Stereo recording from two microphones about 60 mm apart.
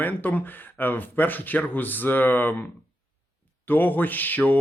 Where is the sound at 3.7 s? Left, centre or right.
Left.